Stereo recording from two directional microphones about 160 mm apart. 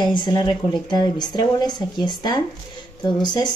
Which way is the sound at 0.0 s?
30° left (ahead or behind).